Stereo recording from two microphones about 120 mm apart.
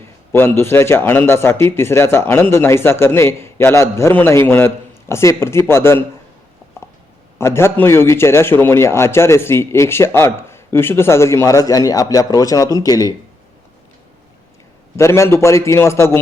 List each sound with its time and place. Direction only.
0.3 s a man's voice: 20° left (ahead or behind)
7.3 s a man's voice: 20° left (ahead or behind)
14.9 s a man's voice: 25° left (ahead or behind)